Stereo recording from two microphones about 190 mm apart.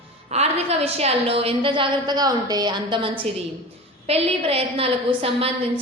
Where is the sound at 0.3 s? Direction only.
35° right (ahead or behind).